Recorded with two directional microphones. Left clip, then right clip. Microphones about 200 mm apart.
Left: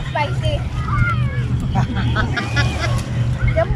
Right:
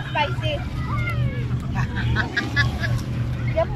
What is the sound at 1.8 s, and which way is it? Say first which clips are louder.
Vehicle: left 4 dB; 35° left (ahead or behind).